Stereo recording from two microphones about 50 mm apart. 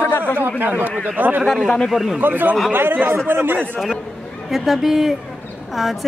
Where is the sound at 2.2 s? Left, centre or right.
Right.